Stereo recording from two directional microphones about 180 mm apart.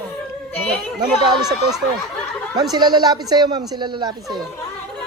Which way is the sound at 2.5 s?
20° right (ahead or behind).